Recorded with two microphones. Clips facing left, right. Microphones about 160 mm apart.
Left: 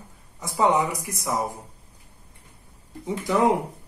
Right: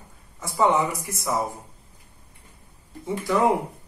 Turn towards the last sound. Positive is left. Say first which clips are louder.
# even
turn(degrees=20)  # may be behind; listen again after turning